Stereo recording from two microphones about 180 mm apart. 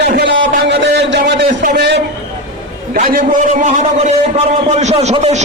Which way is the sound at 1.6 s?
65° right (ahead or behind).